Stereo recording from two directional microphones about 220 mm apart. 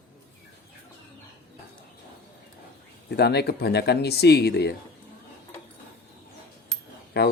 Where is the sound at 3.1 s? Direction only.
50° left (ahead or behind).